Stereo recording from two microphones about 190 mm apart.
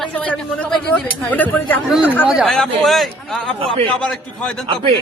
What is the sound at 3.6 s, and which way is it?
Speech, 30° right (ahead or behind).